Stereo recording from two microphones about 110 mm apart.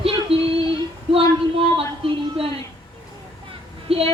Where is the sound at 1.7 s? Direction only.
55° right (ahead or behind).